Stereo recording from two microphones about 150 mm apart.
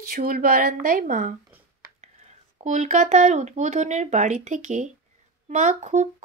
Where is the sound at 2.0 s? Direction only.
50° right (ahead or behind).